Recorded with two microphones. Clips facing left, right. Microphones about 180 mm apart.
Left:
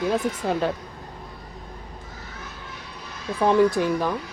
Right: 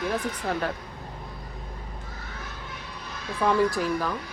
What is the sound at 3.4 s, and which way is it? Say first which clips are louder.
Speech: left 5 dB; 25° left (ahead or behind).